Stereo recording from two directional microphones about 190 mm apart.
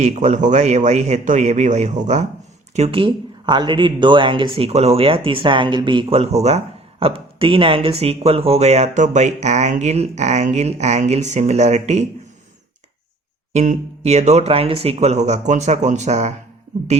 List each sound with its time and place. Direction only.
0.0 s speech: 40° right (ahead or behind)
13.5 s speech: 35° right (ahead or behind)